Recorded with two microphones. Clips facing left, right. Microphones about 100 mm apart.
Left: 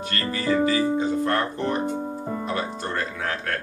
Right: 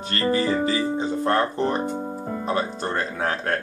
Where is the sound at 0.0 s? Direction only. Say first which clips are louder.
Right 5 dB; 30° right (ahead or behind).